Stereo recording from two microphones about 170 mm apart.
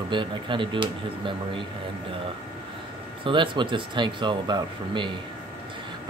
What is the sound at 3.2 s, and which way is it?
Speech, 30° right (ahead or behind).